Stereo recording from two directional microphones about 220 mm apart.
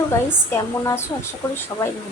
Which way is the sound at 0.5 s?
15° left (ahead or behind).